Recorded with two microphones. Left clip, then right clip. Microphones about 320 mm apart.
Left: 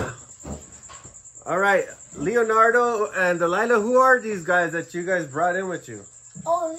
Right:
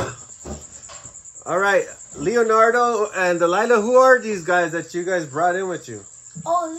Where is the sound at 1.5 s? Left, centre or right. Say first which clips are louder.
Right 2 dB; right.